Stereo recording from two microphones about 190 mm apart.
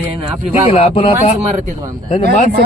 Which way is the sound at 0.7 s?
30° left (ahead or behind).